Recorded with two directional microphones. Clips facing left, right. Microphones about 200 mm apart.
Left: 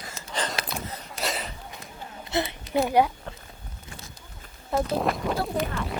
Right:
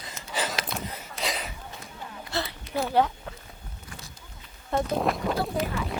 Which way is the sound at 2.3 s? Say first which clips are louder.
Left 5 dB; 20° left (ahead or behind).